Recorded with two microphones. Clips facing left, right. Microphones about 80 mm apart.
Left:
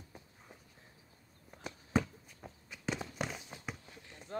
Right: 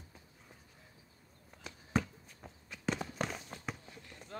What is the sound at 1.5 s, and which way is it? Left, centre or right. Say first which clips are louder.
Walk: left 2 dB; centre.